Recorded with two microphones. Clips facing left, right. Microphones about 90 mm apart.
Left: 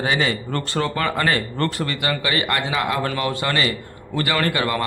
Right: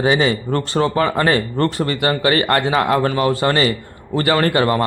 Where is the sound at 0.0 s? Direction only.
25° right (ahead or behind).